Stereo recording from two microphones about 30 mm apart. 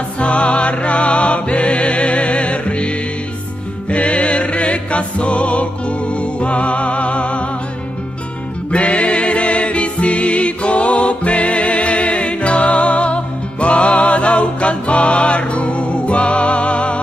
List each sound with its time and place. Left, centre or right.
0.2 s music: left
3.9 s music: left
8.7 s music: left